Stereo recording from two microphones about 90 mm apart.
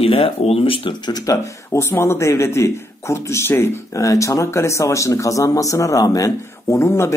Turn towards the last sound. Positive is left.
turn(degrees=30)  # may be behind; listen again after turning